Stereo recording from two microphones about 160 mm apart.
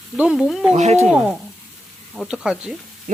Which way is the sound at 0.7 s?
45° right (ahead or behind).